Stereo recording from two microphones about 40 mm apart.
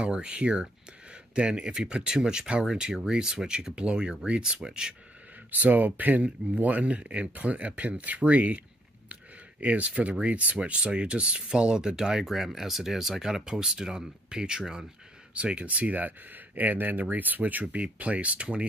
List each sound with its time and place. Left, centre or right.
0.0 s speech: right
5.5 s speech: right
9.1 s a sound: right
10.2 s speech: right
10.8 s speech: right
12.3 s speech: centre
15.3 s speech: right